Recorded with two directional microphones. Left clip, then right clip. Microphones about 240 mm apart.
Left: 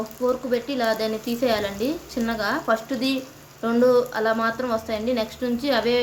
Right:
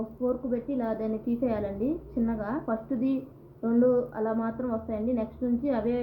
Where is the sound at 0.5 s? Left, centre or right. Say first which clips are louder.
Left 8 dB; centre.